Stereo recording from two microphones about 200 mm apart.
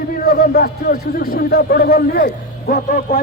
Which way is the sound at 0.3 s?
45° left (ahead or behind).